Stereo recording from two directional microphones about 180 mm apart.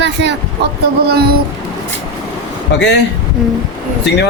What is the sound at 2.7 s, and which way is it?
Speech, 80° left.